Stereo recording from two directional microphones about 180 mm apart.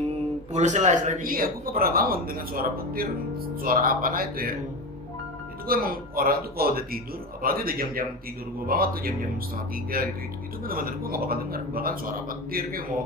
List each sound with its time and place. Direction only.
0.5 s a man's voice: 40° right (ahead or behind)
5.7 s speech: 55° right (ahead or behind)